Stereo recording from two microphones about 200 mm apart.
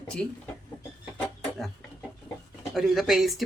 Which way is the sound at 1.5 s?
Centre (ahead or behind).